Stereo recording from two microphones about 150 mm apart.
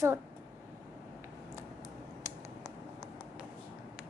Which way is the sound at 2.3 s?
20° right (ahead or behind).